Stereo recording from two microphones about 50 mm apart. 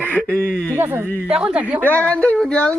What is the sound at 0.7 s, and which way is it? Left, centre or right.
Speech, right.